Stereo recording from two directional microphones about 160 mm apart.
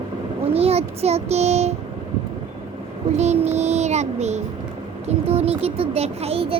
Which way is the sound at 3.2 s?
45° right (ahead or behind).